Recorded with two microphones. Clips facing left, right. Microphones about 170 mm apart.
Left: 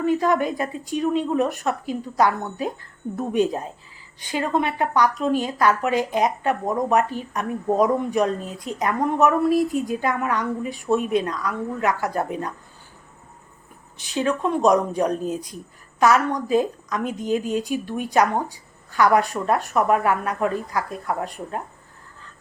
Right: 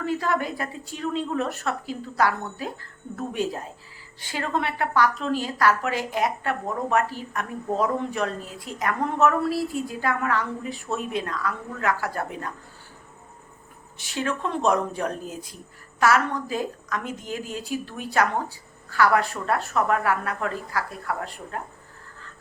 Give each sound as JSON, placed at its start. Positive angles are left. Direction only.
{"t": 0.0, "sound": "a woman's voice", "side_deg": 15}
{"t": 14.0, "sound": "a woman's voice", "side_deg": 20}